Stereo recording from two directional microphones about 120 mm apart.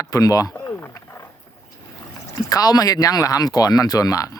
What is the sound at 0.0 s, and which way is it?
Speech, 30° left (ahead or behind).